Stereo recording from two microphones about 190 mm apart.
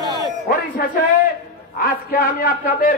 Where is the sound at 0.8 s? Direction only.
50° left (ahead or behind).